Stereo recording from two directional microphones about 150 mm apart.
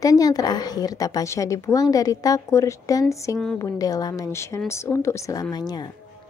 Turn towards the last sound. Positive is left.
turn(degrees=25)  # may be behind; listen again after turning